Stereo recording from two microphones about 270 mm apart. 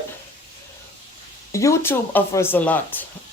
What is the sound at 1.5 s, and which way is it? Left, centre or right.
Speech, centre.